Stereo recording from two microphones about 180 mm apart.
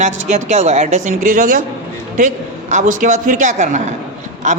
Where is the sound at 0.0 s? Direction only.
40° right (ahead or behind).